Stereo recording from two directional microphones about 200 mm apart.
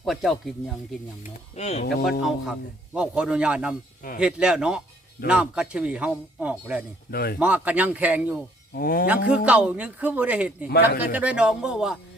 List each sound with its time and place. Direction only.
0.0 s speech: centre (ahead or behind)
1.2 s speech: 35° left (ahead or behind)
2.2 s a man's voice: 5° right (ahead or behind)
7.1 s speech: 50° left (ahead or behind)
7.3 s a man's voice: 5° right (ahead or behind)
8.7 s speech: 45° left (ahead or behind)
9.0 s a man's voice: 5° right (ahead or behind)